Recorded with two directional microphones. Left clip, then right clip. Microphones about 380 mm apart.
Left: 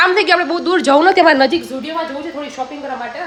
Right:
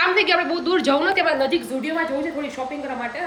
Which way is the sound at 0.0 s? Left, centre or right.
Centre.